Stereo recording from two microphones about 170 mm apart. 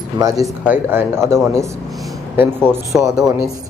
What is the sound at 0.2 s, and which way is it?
Speech, 30° right (ahead or behind).